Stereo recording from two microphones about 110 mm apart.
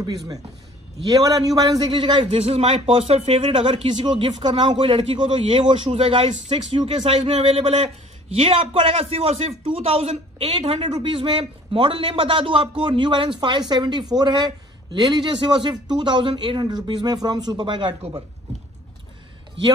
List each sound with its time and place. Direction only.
1.0 s a woman's voice: 35° right (ahead or behind)
2.4 s a man's voice: 70° right (ahead or behind); by 7.0 s 45° right (ahead or behind)
7.0 s speech: 90° right; by 7.9 s 75° right (ahead or behind)
8.4 s a man's voice: 55° right (ahead or behind)
10.8 s a man's voice: 45° right (ahead or behind)